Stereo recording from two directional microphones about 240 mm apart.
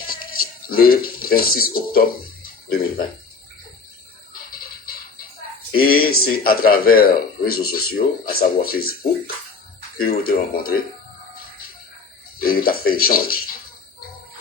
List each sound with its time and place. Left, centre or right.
0.1 s speech: left
5.7 s speech: left
10.0 s speech: left
12.4 s speech: left